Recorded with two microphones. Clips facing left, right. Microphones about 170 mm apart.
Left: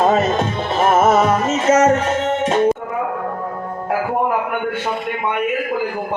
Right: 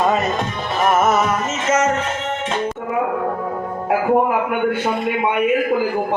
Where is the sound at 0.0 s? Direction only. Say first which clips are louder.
Left 3 dB; 25° left (ahead or behind).